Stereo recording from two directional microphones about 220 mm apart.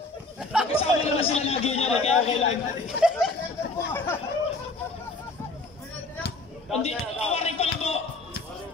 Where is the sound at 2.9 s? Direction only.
50° left (ahead or behind).